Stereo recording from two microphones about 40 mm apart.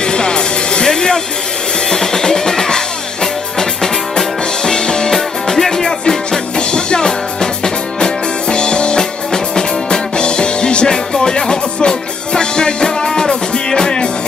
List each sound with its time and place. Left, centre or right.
0.0 s music: left
5.1 s music: centre